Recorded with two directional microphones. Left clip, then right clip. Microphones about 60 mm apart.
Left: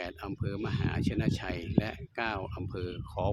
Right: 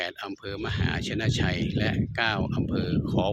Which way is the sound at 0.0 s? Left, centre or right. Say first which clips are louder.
Right 6 dB; right.